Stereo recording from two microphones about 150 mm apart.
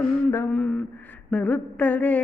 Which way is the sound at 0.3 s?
15° left (ahead or behind).